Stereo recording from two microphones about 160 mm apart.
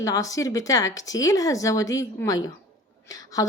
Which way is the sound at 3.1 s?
20° left (ahead or behind).